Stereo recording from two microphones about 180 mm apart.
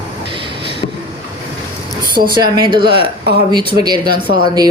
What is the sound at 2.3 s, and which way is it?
Speech, 25° right (ahead or behind).